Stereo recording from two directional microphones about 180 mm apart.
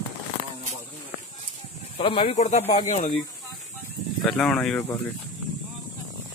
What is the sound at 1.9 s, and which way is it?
Speech, 30° left (ahead or behind).